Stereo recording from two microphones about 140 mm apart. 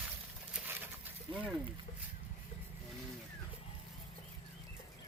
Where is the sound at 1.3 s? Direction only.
35° right (ahead or behind).